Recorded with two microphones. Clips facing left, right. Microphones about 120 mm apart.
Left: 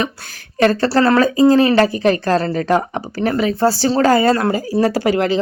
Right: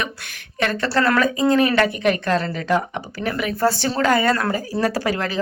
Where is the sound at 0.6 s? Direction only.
35° left (ahead or behind).